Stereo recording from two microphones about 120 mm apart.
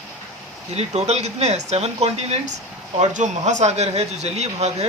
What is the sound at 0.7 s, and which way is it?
Speech, 65° right (ahead or behind).